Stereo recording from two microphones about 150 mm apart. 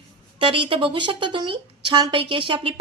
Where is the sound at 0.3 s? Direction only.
35° right (ahead or behind).